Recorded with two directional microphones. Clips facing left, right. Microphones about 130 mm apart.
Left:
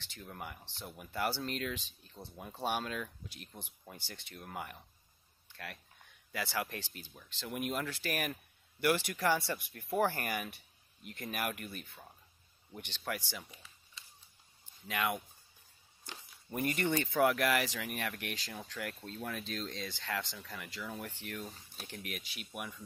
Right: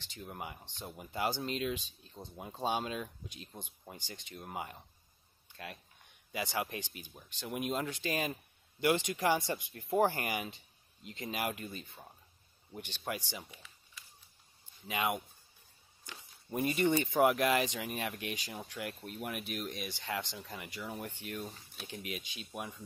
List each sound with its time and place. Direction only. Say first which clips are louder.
0.1 s speech: right 2 dB; 20° right (ahead or behind)
5.5 s a sound: right 1 dB; 20° right (ahead or behind)
6.3 s speech: right 1 dB; 20° right (ahead or behind)
14.0 s a sound: even; 25° left (ahead or behind)
14.9 s speech: right 1 dB; 20° right (ahead or behind)
16.4 s speech: right 3 dB; 20° right (ahead or behind)